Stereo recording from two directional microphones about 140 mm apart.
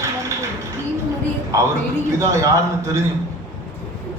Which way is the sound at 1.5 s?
20° right (ahead or behind).